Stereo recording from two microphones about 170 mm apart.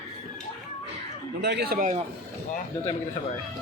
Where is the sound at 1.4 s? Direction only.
75° right (ahead or behind).